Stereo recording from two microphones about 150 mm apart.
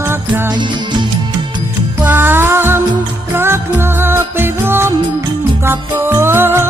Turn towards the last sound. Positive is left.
turn(degrees=-15)  # may be behind; listen again after turning